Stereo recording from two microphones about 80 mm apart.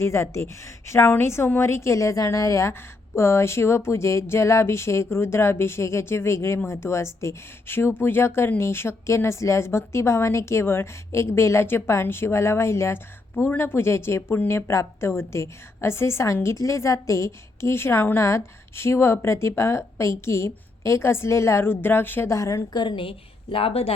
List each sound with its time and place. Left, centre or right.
0.0 s speech: left
22.3 s speech: left
22.7 s a woman's voice: left